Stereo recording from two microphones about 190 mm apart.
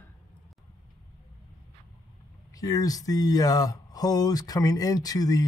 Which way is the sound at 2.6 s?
20° left (ahead or behind).